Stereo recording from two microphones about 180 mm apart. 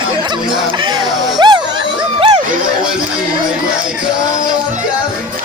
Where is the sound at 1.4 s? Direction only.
25° right (ahead or behind).